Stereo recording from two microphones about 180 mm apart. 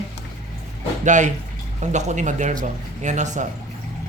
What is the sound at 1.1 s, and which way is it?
Speech, 45° right (ahead or behind).